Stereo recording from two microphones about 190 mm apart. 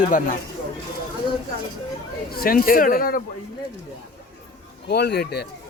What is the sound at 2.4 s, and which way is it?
Speech, 50° left (ahead or behind).